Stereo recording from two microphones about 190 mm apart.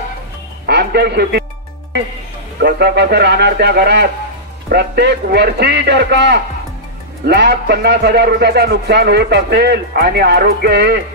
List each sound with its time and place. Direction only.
0.7 s a man's voice: 60° right (ahead or behind)
2.6 s a man's voice: 60° right (ahead or behind)